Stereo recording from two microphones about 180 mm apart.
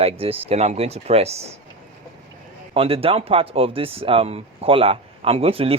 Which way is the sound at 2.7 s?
30° right (ahead or behind).